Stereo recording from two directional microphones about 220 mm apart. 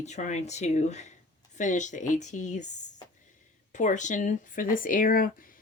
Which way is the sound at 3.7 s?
35° left (ahead or behind).